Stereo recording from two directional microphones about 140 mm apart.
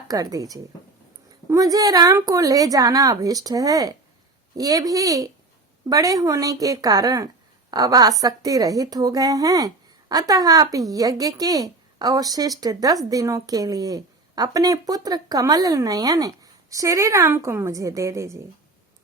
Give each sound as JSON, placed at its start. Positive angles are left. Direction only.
{"t": 0.1, "sound": "a woman's voice", "side_deg": -25}